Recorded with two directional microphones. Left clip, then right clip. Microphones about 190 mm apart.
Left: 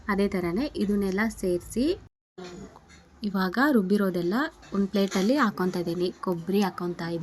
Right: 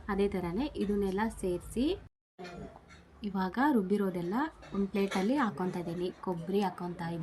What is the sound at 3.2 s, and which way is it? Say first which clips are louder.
Speech: left 6 dB; 35° left (ahead or behind).